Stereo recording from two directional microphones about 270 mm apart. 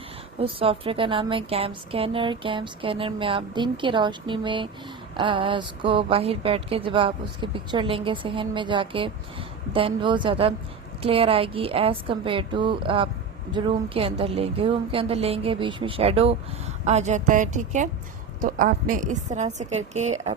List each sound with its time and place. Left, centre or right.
0.3 s a woman's voice: right